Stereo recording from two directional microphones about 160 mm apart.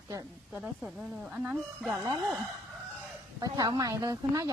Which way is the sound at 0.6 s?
Centre (ahead or behind).